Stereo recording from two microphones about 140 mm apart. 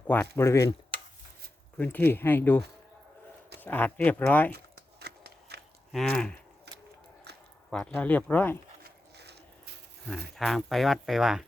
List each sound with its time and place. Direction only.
0.1 s speech: 15° left (ahead or behind)
1.8 s speech: 15° left (ahead or behind)
5.0 s a sound: 90° right
5.9 s speech: centre (ahead or behind)
7.7 s speech: 5° left (ahead or behind)
10.1 s speech: centre (ahead or behind)